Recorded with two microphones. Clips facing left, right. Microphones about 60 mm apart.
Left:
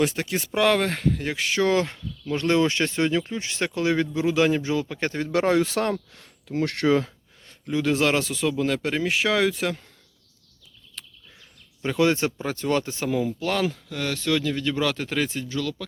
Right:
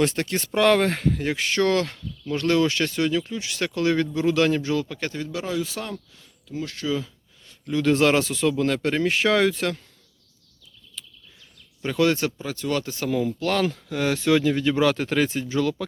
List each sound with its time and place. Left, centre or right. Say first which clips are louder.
0.0 s speech: right 1 dB; centre
1.7 s speech: even; centre
4.9 s speech: left 3 dB; left
5.3 s speech: left 11 dB; left
6.9 s a sound: left 6 dB; left
7.9 s speech: right 4 dB; centre
11.0 s a sound: right 1 dB; left
11.8 s speech: even; centre
12.5 s speech: left 2 dB; left
13.1 s speech: right 3 dB; centre
13.9 s speech: right 7 dB; centre
15.4 s speech: right 5 dB; right